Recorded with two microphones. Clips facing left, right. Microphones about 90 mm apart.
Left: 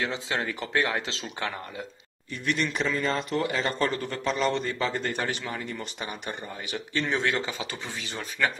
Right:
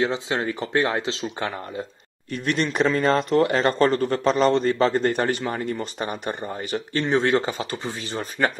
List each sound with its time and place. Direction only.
0.0 s speech: 30° right (ahead or behind)
2.3 s a man's voice: 50° right (ahead or behind)
2.9 s a man's voice: 60° right (ahead or behind); by 8.5 s 40° right (ahead or behind)